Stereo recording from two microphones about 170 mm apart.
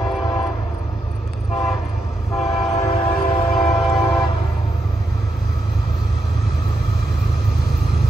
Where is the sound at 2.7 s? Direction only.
35° left (ahead or behind).